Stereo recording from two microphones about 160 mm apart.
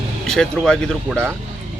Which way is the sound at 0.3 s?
5° left (ahead or behind).